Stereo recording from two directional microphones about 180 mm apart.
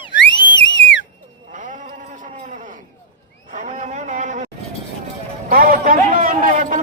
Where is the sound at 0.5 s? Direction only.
90° left.